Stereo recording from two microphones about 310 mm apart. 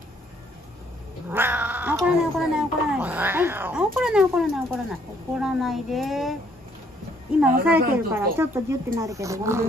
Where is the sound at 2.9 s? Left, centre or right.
Centre.